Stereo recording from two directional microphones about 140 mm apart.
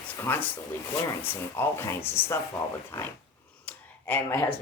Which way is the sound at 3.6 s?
10° left (ahead or behind).